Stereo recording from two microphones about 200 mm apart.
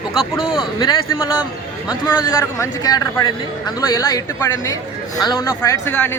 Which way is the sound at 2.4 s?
15° left (ahead or behind).